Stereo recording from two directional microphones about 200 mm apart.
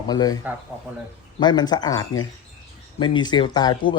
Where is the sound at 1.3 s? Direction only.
20° left (ahead or behind).